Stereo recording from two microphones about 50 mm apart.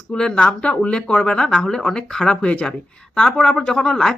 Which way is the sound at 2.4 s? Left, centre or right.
Left.